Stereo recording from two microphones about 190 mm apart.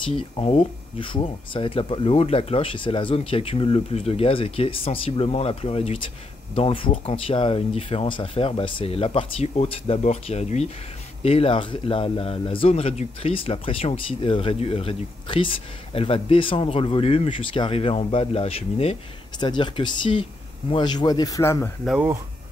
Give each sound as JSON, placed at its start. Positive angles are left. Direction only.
{"t": 0.0, "sound": "speech", "side_deg": 30}
{"t": 21.8, "sound": "speech", "side_deg": -10}